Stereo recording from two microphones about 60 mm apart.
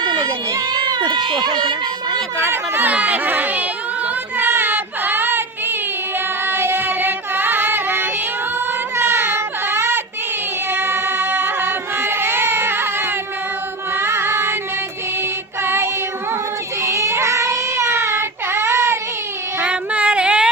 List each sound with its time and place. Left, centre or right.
0.2 s a child's voice: right
2.5 s speech: right
2.9 s a sound: right
4.4 s child singing: right
6.1 s music: right
8.5 s child singing: right
10.7 s music: right
15.6 s child singing: right
16.8 s child singing: right
19.6 s female singing: right